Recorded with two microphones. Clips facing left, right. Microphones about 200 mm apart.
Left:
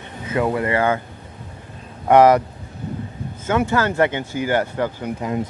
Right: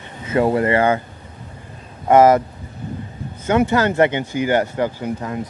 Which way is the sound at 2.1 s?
Centre (ahead or behind).